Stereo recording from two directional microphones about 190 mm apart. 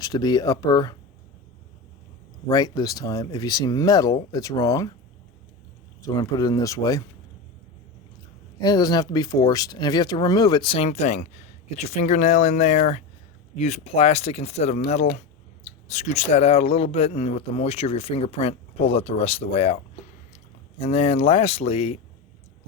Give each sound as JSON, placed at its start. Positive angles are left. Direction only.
{"t": 0.0, "sound": "speech", "side_deg": 20}
{"t": 2.5, "sound": "speech", "side_deg": 20}
{"t": 6.1, "sound": "speech", "side_deg": 20}
{"t": 8.5, "sound": "speech", "side_deg": 20}